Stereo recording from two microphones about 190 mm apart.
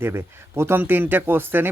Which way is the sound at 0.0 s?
10° right (ahead or behind).